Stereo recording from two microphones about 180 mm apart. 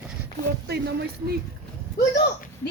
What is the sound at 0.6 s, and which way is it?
Speech, 65° right (ahead or behind).